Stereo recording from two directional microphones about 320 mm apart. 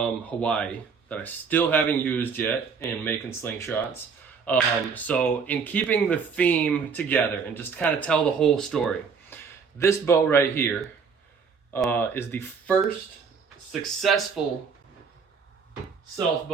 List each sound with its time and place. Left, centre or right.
0.0 s speech: centre
14.0 s speech: centre